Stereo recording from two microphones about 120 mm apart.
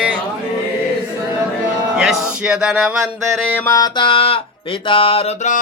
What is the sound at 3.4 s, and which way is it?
Mantra, 15° left (ahead or behind).